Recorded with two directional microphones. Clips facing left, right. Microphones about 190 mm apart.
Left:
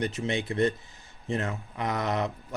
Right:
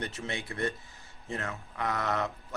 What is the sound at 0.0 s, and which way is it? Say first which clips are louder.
A man's voice: left 7 dB; 20° left (ahead or behind).